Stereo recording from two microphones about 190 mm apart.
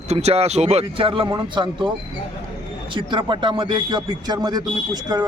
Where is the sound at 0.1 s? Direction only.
35° right (ahead or behind).